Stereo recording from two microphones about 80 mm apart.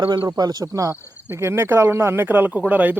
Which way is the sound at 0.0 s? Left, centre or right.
Right.